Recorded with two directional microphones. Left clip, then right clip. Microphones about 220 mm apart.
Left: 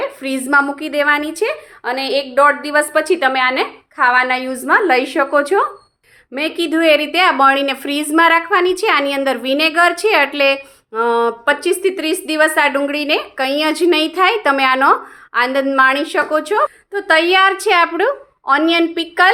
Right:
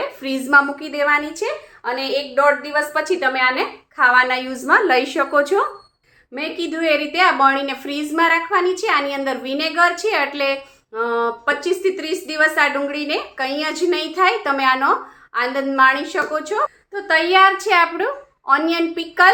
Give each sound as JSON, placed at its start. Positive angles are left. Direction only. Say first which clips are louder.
{"t": 0.0, "sound": "a woman's voice", "louder": "left 3 dB", "side_deg": 20}
{"t": 0.9, "sound": "a woman's voice", "louder": "left 3 dB", "side_deg": 40}
{"t": 6.3, "sound": "a woman's voice", "louder": "left 7 dB", "side_deg": 45}